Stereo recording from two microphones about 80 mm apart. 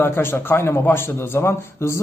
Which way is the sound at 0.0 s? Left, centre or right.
Left.